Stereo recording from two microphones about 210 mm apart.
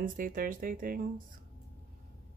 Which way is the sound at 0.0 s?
40° right (ahead or behind).